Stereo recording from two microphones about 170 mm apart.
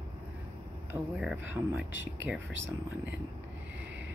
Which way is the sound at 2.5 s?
90° right.